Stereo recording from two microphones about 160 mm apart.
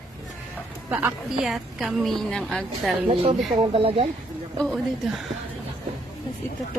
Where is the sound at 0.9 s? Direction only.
10° right (ahead or behind).